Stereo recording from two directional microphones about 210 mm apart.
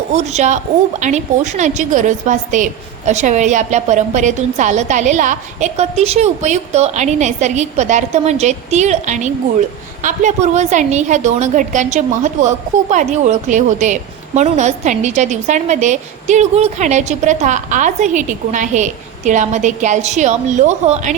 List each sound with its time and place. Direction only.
0.1 s a woman's voice: 35° right (ahead or behind)